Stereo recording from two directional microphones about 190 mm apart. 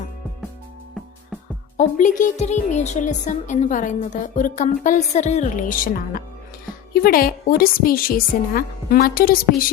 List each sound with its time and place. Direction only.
1.8 s a woman's voice: 40° left (ahead or behind)